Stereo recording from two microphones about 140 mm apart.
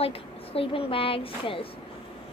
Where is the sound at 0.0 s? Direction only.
45° left (ahead or behind).